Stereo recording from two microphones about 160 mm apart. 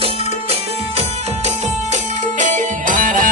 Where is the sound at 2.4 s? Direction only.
50° right (ahead or behind).